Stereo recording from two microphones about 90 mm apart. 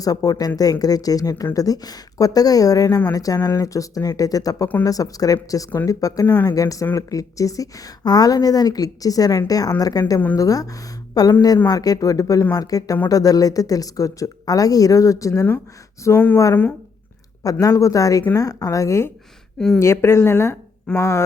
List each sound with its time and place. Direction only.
0.0 s speech: 40° left (ahead or behind)
16.1 s speech: 20° left (ahead or behind)
17.4 s speech: 40° left (ahead or behind)
19.5 s a woman's voice: 5° left (ahead or behind)
19.8 s speech: 30° left (ahead or behind)